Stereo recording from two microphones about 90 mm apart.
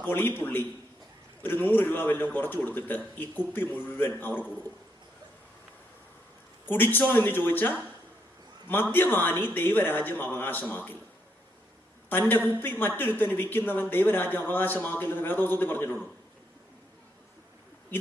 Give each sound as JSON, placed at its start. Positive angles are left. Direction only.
{"t": 0.0, "sound": "speech", "side_deg": 25}
{"t": 6.7, "sound": "a man's voice", "side_deg": 20}
{"t": 12.0, "sound": "a man's voice", "side_deg": 20}